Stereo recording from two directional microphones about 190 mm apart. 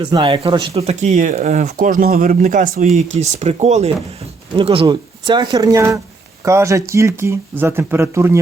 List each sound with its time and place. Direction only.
0.0 s speech: 25° right (ahead or behind)